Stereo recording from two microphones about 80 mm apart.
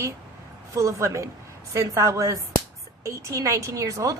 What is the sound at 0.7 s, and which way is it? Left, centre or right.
A woman's voice, right.